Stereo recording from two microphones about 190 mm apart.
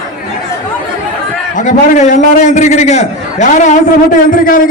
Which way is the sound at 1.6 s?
40° left (ahead or behind).